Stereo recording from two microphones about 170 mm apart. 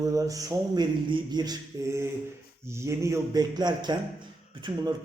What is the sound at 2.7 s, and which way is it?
Speech, 15° right (ahead or behind).